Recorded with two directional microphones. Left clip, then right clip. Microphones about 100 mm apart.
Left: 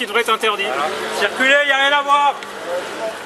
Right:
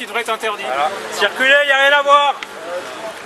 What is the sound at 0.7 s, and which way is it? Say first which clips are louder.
Speech: right 2 dB; 25° right (ahead or behind).